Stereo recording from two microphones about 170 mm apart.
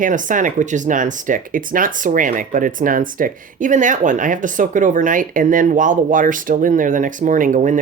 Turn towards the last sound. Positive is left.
turn(degrees=-50)  # may be behind; listen again after turning